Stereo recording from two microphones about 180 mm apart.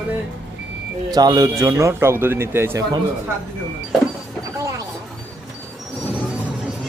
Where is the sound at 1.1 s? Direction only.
20° right (ahead or behind).